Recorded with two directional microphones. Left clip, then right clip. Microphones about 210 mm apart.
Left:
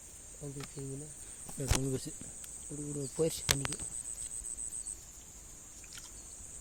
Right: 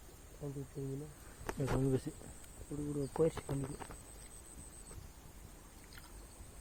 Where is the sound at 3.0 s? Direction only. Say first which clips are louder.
Even; 35° left (ahead or behind).